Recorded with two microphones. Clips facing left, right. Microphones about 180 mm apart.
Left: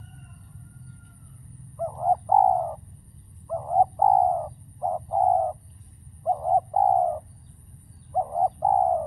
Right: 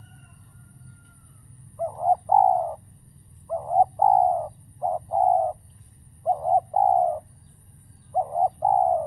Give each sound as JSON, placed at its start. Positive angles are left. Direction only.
{"t": 1.8, "sound": "bird", "side_deg": -10}